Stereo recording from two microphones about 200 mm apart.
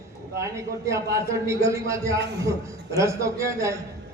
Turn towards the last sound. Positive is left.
turn(degrees=-15)  # may be behind; listen again after turning